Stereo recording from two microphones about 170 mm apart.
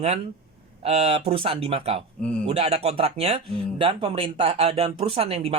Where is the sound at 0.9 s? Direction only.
40° right (ahead or behind).